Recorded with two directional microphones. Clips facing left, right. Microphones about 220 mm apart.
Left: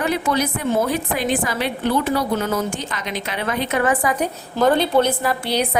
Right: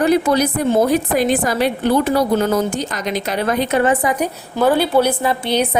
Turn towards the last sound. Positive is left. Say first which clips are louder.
# right 3 dB
turn(degrees=-20)  # may be behind; listen again after turning